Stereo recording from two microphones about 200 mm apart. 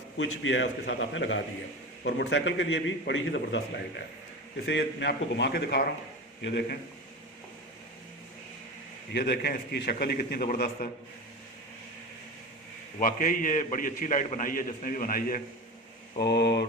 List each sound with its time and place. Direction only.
0.2 s a man's voice: 70° left (ahead or behind)
9.1 s a man's voice: 55° left (ahead or behind)
13.0 s a man's voice: 40° left (ahead or behind)
16.1 s a man's voice: 55° left (ahead or behind)